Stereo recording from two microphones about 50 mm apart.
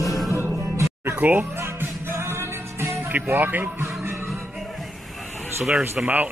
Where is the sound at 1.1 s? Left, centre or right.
Right.